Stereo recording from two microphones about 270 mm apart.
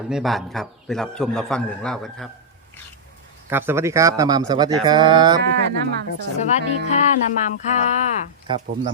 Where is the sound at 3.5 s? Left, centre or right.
Centre.